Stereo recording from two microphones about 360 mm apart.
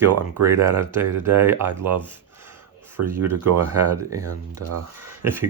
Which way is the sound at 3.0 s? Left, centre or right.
Right.